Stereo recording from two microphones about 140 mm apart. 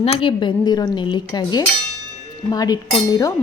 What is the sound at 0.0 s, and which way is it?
A woman's voice, 40° left (ahead or behind).